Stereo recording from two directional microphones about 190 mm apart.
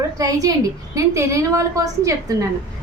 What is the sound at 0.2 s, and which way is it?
A woman's voice, 20° right (ahead or behind).